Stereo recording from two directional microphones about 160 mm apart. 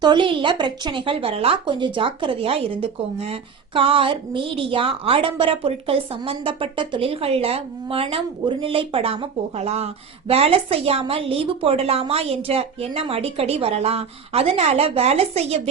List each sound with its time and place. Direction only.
0.0 s a woman's voice: 30° right (ahead or behind)